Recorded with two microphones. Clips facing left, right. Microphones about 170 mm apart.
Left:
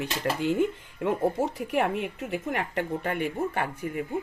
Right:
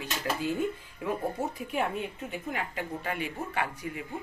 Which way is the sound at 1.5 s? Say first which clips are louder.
Left 5 dB; 80° left.